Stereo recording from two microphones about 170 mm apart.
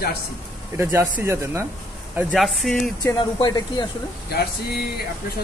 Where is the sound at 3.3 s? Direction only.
25° left (ahead or behind).